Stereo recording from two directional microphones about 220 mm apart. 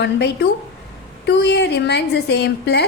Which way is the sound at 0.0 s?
50° left (ahead or behind).